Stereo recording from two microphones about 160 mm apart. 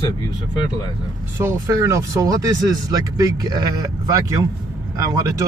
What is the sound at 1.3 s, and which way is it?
Speech, 15° right (ahead or behind).